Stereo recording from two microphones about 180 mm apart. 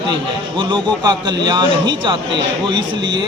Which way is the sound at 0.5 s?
25° right (ahead or behind).